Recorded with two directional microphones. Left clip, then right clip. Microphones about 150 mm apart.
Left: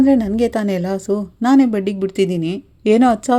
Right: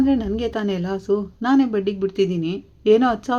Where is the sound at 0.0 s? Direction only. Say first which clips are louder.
Left 6 dB; 45° left (ahead or behind).